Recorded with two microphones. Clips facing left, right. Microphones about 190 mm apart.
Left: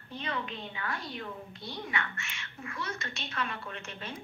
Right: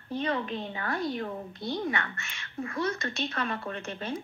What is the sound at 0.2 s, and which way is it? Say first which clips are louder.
A woman's voice: right 6 dB; 40° right (ahead or behind).